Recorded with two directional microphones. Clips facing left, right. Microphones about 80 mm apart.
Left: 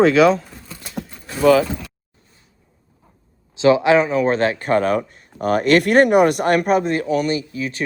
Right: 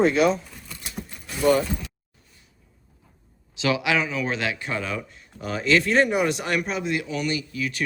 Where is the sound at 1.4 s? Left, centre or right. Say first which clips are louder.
Left 6 dB; left.